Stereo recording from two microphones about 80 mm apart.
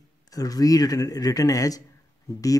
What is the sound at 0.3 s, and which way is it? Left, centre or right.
Speech, left.